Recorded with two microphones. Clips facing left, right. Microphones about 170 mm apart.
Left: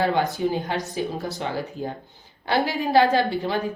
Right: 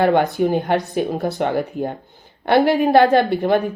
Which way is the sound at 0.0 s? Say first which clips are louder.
Right 6 dB; 60° right (ahead or behind).